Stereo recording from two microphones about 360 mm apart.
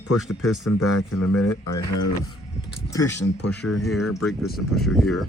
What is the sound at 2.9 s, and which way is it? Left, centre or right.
Speech, centre.